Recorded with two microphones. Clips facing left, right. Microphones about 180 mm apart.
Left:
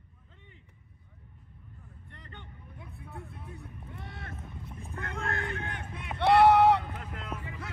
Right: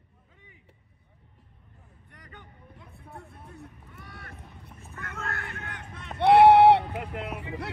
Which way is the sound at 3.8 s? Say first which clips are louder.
Left 3 dB; 25° left (ahead or behind).